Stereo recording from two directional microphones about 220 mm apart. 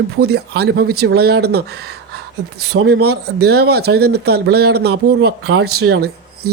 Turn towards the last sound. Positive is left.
turn(degrees=-45)  # may be behind; listen again after turning